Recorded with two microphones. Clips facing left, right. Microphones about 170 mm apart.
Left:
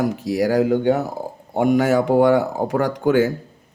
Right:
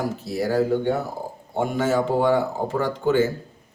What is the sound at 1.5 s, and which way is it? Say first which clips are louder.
A man's voice: left 5 dB; 15° left (ahead or behind).